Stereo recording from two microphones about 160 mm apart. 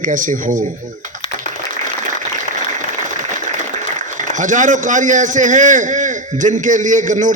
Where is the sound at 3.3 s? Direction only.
50° right (ahead or behind).